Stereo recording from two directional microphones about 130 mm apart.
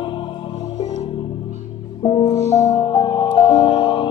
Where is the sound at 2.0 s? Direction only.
40° left (ahead or behind).